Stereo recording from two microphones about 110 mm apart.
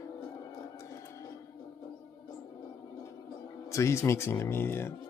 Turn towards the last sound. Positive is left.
turn(degrees=20)  # may be behind; listen again after turning